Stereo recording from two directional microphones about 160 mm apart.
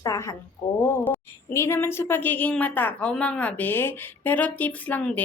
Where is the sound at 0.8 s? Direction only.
15° left (ahead or behind).